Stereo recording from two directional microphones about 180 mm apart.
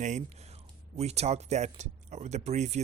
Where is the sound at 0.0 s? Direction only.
40° right (ahead or behind).